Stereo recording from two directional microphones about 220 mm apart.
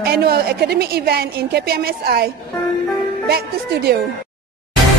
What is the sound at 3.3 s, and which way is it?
Speech, 45° right (ahead or behind).